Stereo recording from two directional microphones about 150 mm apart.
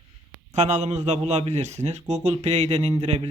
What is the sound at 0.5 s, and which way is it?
A man's voice, 50° right (ahead or behind).